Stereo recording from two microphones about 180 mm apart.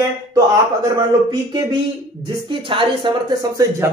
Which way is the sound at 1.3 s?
25° right (ahead or behind).